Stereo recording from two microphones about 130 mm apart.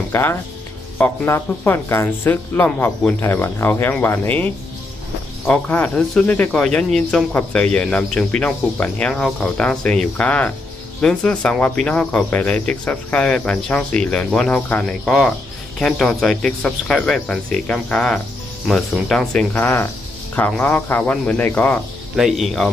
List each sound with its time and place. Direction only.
0.1 s speech: 20° left (ahead or behind)
5.5 s speech: 10° left (ahead or behind)
19.5 s speech: 15° left (ahead or behind)
22.1 s speech: centre (ahead or behind)